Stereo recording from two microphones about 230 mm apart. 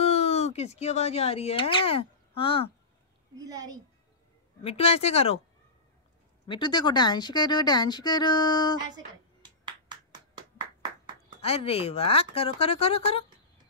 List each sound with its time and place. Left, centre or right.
0.0 s speech: left
3.3 s a woman's voice: centre
4.6 s speech: left
6.4 s speech: centre
8.9 s clapping: centre
11.4 s speech: left